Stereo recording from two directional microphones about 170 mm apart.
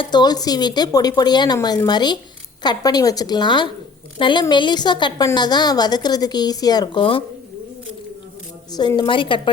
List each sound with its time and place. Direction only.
0.0 s a woman's voice: 25° left (ahead or behind)
8.7 s a woman's voice: 25° left (ahead or behind)